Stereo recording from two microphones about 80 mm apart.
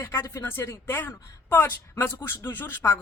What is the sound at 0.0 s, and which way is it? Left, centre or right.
A woman's voice, left.